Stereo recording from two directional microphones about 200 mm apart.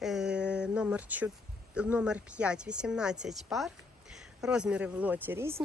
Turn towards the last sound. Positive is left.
turn(degrees=-10)  # may be behind; listen again after turning